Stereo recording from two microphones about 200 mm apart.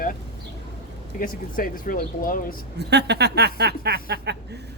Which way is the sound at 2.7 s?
55° right (ahead or behind).